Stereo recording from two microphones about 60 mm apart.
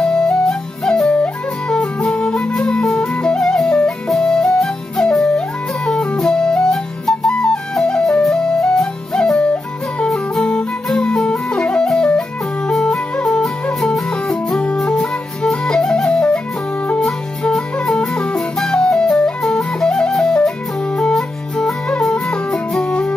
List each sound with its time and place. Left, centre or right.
0.0 s flute: centre
1.8 s music: centre
2.1 s flute: centre
9.4 s music: centre
10.0 s music: centre
22.8 s music: centre